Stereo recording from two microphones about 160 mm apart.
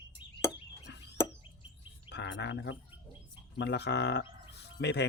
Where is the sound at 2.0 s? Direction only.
90° left.